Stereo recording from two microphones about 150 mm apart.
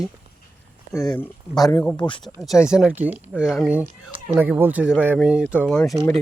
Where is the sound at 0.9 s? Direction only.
25° left (ahead or behind).